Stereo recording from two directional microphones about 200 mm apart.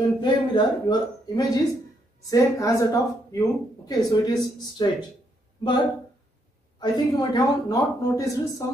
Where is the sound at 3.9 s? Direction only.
20° left (ahead or behind).